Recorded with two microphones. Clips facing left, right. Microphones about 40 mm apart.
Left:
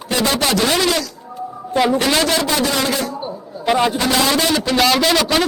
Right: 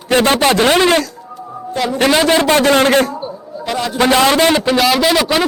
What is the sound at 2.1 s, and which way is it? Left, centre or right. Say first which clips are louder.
Speech: right 5 dB; centre.